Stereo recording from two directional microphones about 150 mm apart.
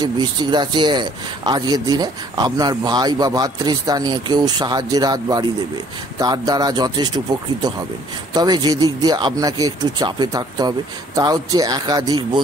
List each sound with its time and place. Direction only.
0.0 s a man's voice: 30° right (ahead or behind)
8.4 s a man's voice: 25° right (ahead or behind)